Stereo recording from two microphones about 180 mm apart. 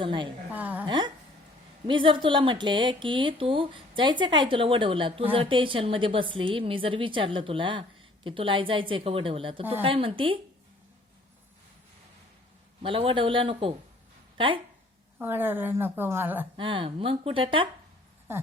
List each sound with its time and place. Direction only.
0.0 s a woman's voice: 25° right (ahead or behind)
0.5 s a sound: 10° right (ahead or behind)
0.9 s a woman's voice: 25° right (ahead or behind)
12.8 s a woman's voice: 30° right (ahead or behind)
15.2 s a woman's voice: 10° right (ahead or behind)
16.6 s a woman's voice: 30° right (ahead or behind)